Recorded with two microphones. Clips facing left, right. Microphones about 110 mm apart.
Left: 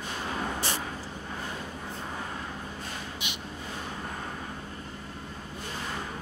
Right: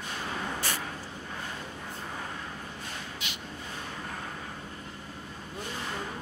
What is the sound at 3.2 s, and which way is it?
Crow, 20° left (ahead or behind).